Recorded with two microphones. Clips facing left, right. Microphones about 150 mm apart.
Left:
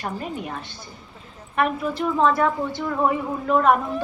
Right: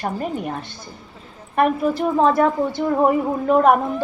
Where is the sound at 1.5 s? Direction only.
45° right (ahead or behind).